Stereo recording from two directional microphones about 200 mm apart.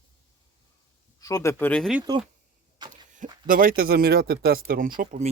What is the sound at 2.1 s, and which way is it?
Speech, 20° right (ahead or behind).